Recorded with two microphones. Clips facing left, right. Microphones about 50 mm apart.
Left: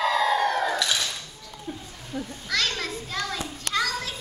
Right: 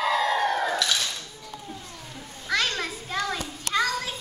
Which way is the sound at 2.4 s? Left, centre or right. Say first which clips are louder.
Right 2 dB; centre.